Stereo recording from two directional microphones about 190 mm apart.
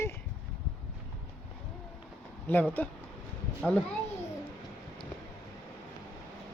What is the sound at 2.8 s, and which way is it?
A man's voice, 10° left (ahead or behind).